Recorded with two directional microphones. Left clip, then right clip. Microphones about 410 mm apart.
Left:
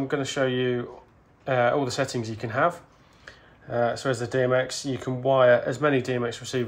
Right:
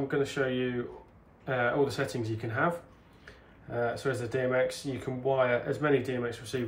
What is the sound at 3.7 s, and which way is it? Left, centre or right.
Speech, centre.